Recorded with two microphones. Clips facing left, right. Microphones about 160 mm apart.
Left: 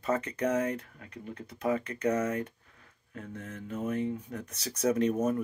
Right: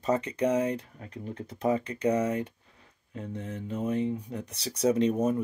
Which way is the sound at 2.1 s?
15° right (ahead or behind).